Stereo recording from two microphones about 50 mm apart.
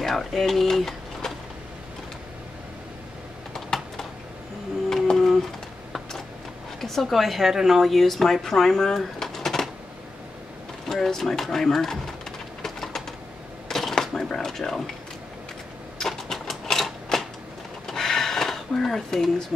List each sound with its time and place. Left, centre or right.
0.0 s speech: centre
3.5 s typing: centre
4.8 s printer: centre
6.8 s speech: centre
10.9 s pigeon: centre
13.7 s a sound: centre
16.0 s typewriter: centre
17.8 s a sound: centre